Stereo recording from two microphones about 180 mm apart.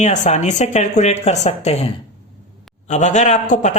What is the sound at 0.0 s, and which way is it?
Speech, 40° left (ahead or behind).